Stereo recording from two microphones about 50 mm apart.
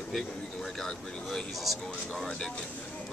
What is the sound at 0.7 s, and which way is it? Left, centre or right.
Speech, centre.